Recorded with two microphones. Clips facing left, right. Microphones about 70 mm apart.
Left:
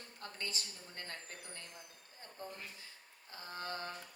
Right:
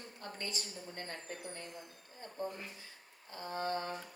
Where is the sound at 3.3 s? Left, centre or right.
Right.